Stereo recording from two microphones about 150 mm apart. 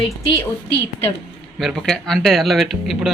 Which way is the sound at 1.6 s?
Centre (ahead or behind).